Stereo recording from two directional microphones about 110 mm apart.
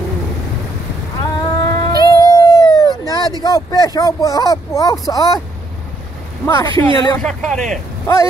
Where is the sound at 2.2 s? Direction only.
35° left (ahead or behind).